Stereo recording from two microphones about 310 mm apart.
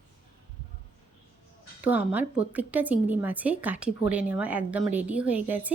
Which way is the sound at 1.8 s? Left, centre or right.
Centre.